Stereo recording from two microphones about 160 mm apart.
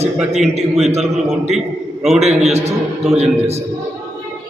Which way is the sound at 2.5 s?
40° right (ahead or behind).